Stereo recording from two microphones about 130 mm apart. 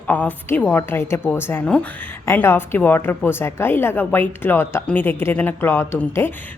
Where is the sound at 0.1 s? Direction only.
10° left (ahead or behind).